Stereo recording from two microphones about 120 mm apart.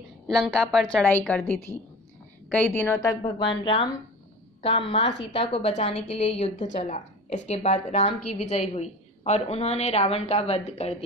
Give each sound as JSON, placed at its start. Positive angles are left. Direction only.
{"t": 0.3, "sound": "a woman's voice", "side_deg": 5}
{"t": 2.5, "sound": "a woman's voice", "side_deg": 25}
{"t": 3.2, "sound": "a woman's voice", "side_deg": 45}